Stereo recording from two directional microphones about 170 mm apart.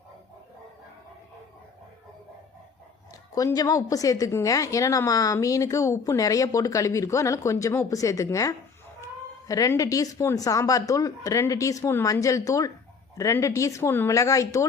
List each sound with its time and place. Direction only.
3.3 s a woman's voice: 20° left (ahead or behind)